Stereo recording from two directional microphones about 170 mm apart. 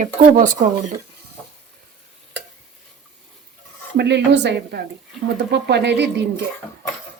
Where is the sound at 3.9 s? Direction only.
85° right.